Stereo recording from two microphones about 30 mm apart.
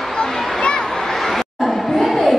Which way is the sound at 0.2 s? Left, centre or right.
Left.